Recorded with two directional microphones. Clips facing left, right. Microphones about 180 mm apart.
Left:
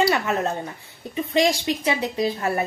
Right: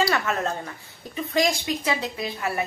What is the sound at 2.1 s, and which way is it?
Speech, 40° left (ahead or behind).